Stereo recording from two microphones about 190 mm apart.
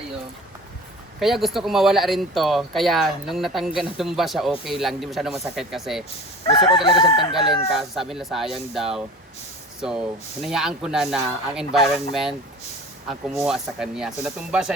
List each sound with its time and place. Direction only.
1.2 s speech: centre (ahead or behind)
6.5 s chicken: 25° left (ahead or behind)
7.5 s speech: centre (ahead or behind)